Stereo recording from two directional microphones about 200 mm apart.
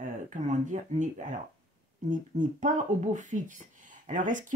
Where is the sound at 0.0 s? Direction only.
40° right (ahead or behind).